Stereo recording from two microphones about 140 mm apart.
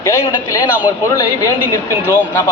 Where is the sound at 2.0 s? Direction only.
15° right (ahead or behind).